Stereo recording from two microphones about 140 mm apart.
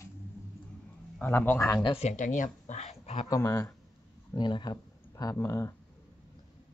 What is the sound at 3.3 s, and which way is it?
Speech, 20° left (ahead or behind).